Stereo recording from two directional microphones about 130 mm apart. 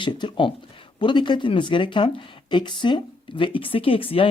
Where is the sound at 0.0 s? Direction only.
40° left (ahead or behind).